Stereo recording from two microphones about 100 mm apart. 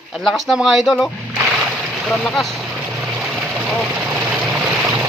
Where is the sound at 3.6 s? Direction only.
Centre (ahead or behind).